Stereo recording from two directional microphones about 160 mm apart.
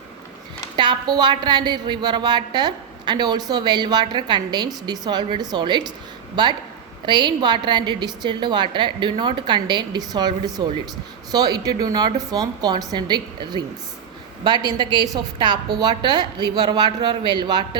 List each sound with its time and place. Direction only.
0.8 s a woman's voice: 25° right (ahead or behind)